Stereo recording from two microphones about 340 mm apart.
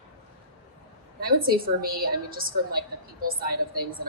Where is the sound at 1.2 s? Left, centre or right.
Right.